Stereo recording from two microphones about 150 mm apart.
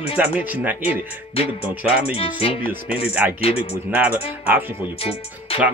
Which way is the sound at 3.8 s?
10° right (ahead or behind).